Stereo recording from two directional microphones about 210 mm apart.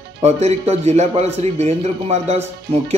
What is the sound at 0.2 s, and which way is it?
Speech, 30° right (ahead or behind).